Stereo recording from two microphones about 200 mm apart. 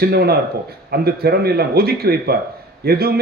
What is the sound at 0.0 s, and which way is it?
A man's voice, 50° right (ahead or behind).